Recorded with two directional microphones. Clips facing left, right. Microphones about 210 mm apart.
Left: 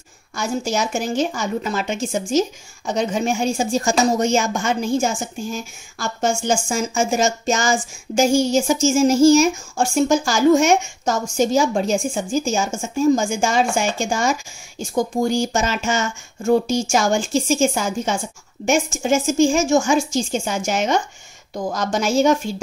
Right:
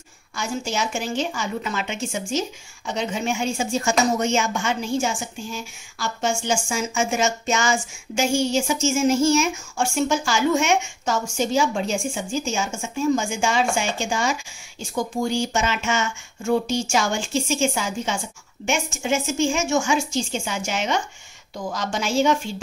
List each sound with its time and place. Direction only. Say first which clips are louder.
0.4 s a woman's voice: left 4 dB; 40° left (ahead or behind)